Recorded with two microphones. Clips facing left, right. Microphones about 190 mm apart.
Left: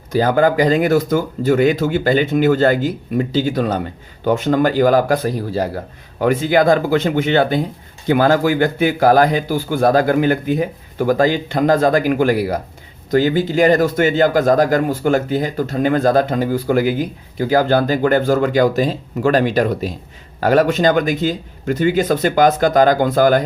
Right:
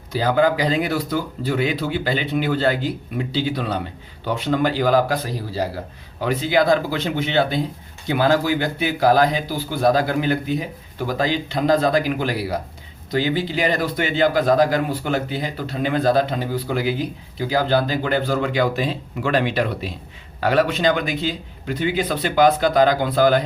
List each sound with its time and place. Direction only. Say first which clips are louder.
0.1 s speech: left 4 dB; 50° left (ahead or behind)